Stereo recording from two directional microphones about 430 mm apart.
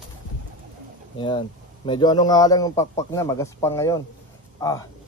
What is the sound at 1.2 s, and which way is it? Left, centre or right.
Speech, centre.